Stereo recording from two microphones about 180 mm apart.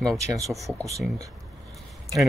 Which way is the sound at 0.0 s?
Centre (ahead or behind).